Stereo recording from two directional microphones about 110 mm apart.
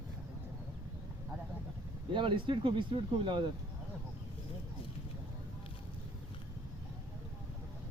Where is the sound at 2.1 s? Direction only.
50° right (ahead or behind).